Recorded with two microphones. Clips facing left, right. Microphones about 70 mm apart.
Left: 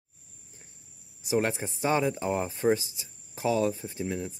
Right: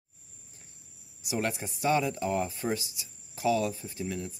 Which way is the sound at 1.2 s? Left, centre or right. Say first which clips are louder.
Left 4 dB; left.